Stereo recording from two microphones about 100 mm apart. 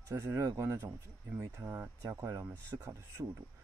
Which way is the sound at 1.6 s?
15° right (ahead or behind).